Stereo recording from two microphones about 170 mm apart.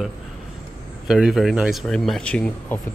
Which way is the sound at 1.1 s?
5° right (ahead or behind).